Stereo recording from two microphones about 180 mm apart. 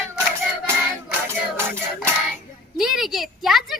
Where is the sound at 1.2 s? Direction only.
15° right (ahead or behind).